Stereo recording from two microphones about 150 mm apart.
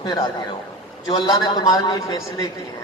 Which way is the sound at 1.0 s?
25° left (ahead or behind).